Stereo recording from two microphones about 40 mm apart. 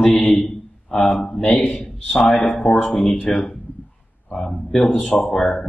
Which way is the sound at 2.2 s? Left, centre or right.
Centre.